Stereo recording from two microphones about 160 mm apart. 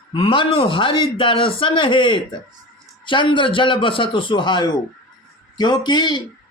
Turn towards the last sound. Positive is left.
turn(degrees=25)  # may be behind; listen again after turning